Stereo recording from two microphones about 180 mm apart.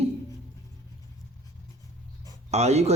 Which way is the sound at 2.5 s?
35° right (ahead or behind).